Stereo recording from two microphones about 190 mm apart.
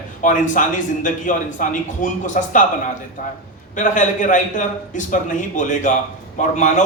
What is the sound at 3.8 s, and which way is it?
A man's voice, 40° left (ahead or behind).